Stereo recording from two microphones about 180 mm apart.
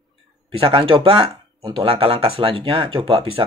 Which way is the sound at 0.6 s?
30° right (ahead or behind).